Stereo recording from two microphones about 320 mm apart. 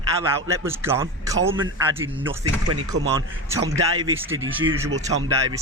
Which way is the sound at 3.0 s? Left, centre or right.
Right.